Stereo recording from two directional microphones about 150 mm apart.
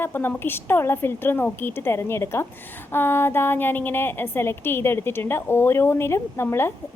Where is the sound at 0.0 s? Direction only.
15° left (ahead or behind).